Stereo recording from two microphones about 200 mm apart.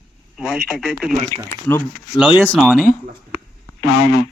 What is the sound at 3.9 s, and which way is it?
Speech, 65° left (ahead or behind).